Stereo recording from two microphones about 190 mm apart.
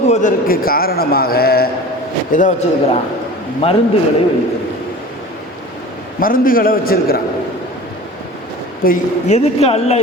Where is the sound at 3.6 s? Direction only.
30° left (ahead or behind).